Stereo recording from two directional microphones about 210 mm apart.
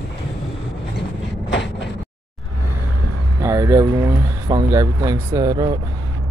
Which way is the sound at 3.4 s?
15° right (ahead or behind).